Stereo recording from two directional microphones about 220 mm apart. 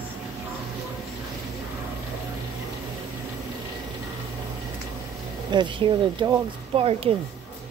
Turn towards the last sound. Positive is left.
turn(degrees=-25)  # may be behind; listen again after turning